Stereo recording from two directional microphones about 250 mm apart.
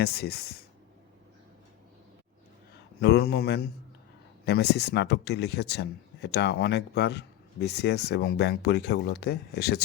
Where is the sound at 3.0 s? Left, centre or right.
Left.